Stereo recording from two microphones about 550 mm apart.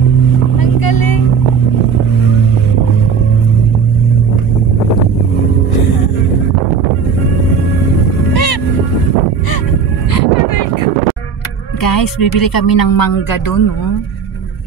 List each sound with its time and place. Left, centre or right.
0.6 s vehicle: left
8.3 s boat: left
10.1 s music: left
11.8 s speech: left